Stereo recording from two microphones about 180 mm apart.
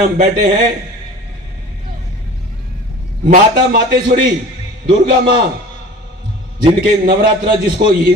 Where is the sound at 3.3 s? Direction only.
50° right (ahead or behind).